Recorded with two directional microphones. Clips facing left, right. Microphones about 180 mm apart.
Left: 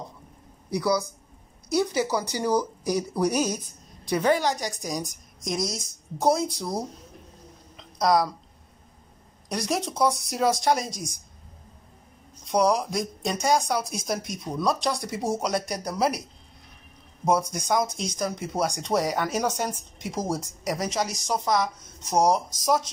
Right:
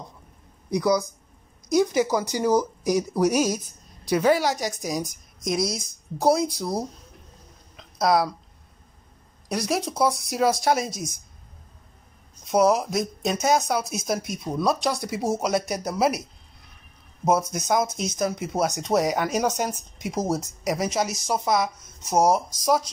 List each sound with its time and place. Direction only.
0.7 s a woman's voice: 15° right (ahead or behind)
7.7 s a sound: 5° right (ahead or behind)
9.5 s a woman's voice: 5° right (ahead or behind)
12.4 s a woman's voice: 5° right (ahead or behind)
17.2 s a woman's voice: 5° right (ahead or behind)